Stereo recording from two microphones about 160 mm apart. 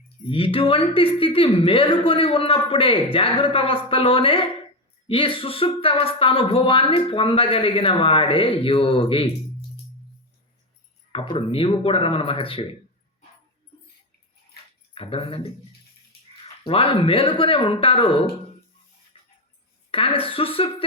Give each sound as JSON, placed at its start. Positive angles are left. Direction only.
{"t": 0.3, "sound": "speech", "side_deg": 35}
{"t": 11.1, "sound": "speech", "side_deg": 35}
{"t": 14.9, "sound": "speech", "side_deg": 35}
{"t": 16.6, "sound": "speech", "side_deg": 35}
{"t": 19.1, "sound": "a sound", "side_deg": 35}
{"t": 19.9, "sound": "speech", "side_deg": 35}